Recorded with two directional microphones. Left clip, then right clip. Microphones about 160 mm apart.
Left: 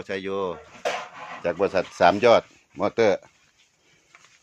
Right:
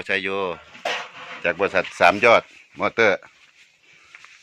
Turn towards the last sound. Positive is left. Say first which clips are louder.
# right 2 dB
turn(degrees=15)  # may be behind; listen again after turning